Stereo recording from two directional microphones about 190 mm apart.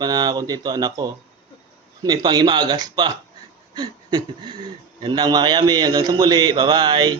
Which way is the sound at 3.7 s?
20° right (ahead or behind).